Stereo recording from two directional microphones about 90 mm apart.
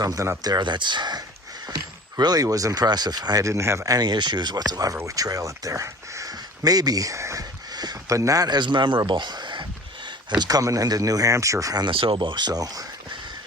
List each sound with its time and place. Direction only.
0.0 s speech: 40° right (ahead or behind); by 9.0 s 60° right (ahead or behind)
9.0 s a sound: 55° right (ahead or behind)
10.4 s speech: 40° right (ahead or behind)
11.9 s speech: 75° right (ahead or behind); by 12.8 s 45° right (ahead or behind)